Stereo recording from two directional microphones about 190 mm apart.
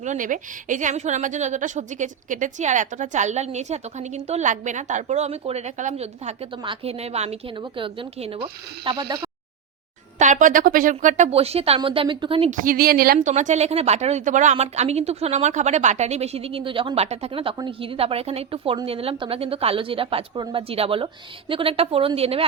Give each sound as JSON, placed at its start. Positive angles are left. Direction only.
{"t": 0.0, "sound": "a woman's voice", "side_deg": -40}
{"t": 10.2, "sound": "a woman's voice", "side_deg": -40}
{"t": 12.5, "sound": "a woman's voice", "side_deg": -50}
{"t": 13.1, "sound": "a woman's voice", "side_deg": -40}